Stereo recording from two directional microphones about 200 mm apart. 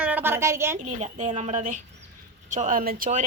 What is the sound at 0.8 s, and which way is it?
Speech, 40° right (ahead or behind).